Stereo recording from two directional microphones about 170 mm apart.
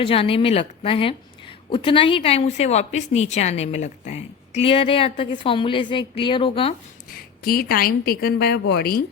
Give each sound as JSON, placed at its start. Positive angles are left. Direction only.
{"t": 0.0, "sound": "speech", "side_deg": 35}
{"t": 7.1, "sound": "a woman's voice", "side_deg": 60}